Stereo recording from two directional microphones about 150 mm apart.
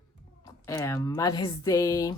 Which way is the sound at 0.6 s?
20° left (ahead or behind).